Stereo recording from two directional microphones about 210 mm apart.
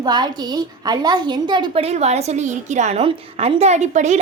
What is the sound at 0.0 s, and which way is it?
A woman's voice, 20° right (ahead or behind).